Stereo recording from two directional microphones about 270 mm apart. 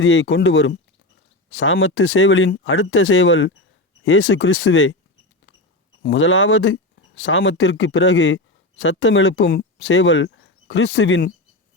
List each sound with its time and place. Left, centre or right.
0.0 s speech: left
6.0 s speech: left